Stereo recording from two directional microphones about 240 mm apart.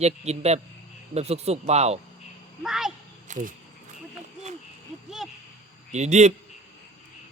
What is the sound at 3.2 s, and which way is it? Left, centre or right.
Speech, right.